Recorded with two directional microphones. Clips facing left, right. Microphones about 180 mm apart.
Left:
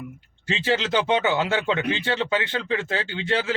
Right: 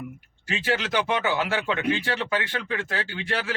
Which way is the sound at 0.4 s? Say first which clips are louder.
Left 3 dB; 25° left (ahead or behind).